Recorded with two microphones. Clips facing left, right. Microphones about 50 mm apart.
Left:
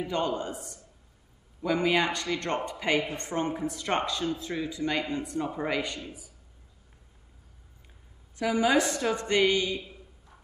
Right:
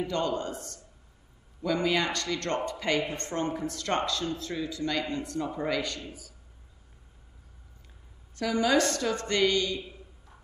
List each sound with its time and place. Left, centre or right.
0.0 s speech: centre
8.4 s speech: centre